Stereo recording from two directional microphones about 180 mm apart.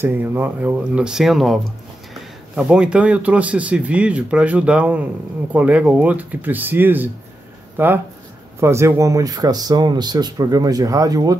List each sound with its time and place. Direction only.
0.0 s speech: 10° right (ahead or behind)